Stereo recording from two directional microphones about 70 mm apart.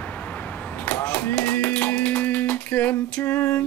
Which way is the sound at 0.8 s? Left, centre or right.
Centre.